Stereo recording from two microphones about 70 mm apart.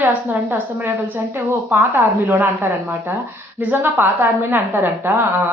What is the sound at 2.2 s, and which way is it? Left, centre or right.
A woman's voice, right.